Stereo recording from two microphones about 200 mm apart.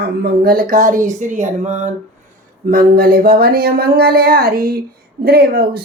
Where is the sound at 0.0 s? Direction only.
50° right (ahead or behind).